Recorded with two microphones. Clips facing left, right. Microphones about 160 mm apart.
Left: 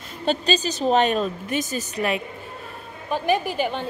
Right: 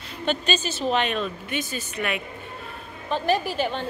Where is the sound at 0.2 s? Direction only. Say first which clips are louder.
Left 3 dB; 35° left (ahead or behind).